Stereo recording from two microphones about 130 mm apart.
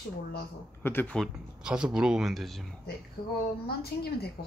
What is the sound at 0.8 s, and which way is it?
Speech, 15° left (ahead or behind).